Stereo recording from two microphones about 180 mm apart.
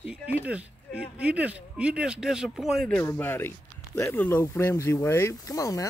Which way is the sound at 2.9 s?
10° left (ahead or behind).